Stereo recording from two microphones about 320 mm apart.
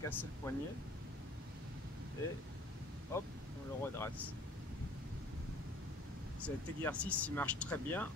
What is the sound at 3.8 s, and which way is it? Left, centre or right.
Speech, centre.